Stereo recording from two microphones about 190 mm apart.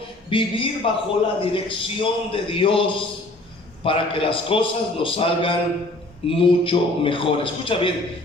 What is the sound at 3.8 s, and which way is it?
A man's voice, 30° left (ahead or behind).